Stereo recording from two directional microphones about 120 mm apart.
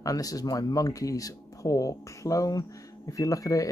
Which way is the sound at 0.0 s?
30° left (ahead or behind).